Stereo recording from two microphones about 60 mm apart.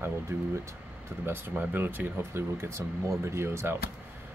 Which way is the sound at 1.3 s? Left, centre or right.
Right.